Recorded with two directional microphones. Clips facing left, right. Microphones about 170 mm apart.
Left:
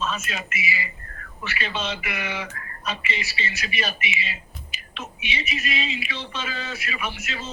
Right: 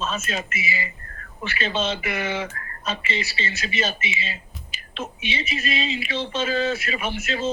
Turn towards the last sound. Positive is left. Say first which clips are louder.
# right 7 dB
turn(degrees=-25)  # may be behind; listen again after turning